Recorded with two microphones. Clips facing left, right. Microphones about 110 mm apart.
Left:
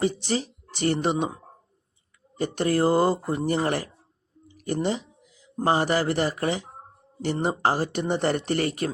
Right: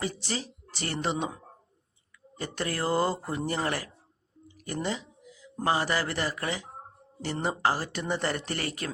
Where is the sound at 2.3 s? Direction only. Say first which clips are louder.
Left 9 dB; 20° left (ahead or behind).